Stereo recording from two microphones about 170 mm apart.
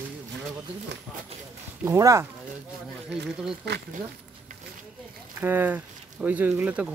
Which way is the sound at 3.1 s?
90° right.